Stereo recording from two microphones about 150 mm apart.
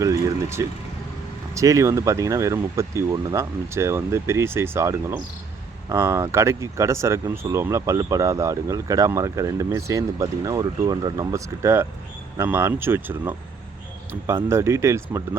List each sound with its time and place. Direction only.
0.0 s speech: 20° right (ahead or behind)